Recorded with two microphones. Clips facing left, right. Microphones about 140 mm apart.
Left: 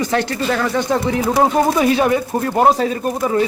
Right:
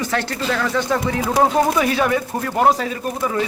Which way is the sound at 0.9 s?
30° left (ahead or behind).